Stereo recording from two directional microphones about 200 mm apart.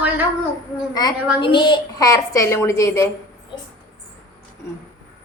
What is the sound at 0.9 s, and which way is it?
A woman's voice, 20° left (ahead or behind).